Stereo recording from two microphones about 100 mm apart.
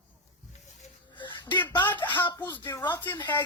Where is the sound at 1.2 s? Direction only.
50° left (ahead or behind).